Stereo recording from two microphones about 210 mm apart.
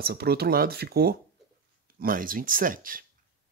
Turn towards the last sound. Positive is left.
turn(degrees=-40)  # may be behind; listen again after turning